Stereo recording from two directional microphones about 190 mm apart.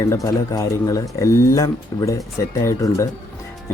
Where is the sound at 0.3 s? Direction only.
15° left (ahead or behind).